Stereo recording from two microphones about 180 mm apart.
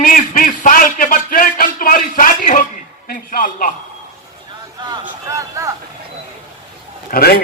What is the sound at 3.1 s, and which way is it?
Speech, 50° left (ahead or behind).